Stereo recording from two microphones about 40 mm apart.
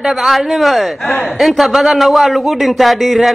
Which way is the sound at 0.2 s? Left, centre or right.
Centre.